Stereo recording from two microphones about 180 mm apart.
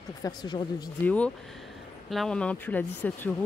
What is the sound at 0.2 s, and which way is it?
Speech, 25° left (ahead or behind).